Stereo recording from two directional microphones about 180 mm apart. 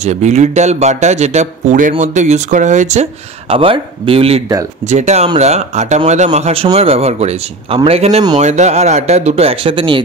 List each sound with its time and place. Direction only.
0.0 s speech: 40° right (ahead or behind)